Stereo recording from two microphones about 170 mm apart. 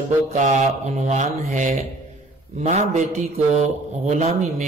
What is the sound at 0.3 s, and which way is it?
A man's voice, 45° right (ahead or behind).